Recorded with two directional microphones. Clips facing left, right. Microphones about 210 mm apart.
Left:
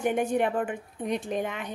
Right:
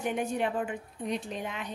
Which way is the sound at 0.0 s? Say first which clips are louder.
Left 5 dB; 50° left (ahead or behind).